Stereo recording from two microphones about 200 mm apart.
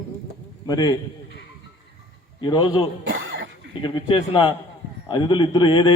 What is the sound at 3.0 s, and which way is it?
Cough, 75° right (ahead or behind).